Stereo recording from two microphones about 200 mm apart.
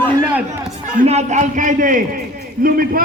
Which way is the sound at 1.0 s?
35° right (ahead or behind).